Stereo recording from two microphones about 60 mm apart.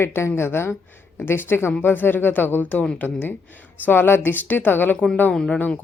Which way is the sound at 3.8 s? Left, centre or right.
Left.